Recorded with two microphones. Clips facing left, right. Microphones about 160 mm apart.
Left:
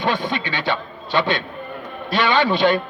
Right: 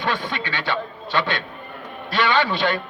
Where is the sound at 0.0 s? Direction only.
15° left (ahead or behind).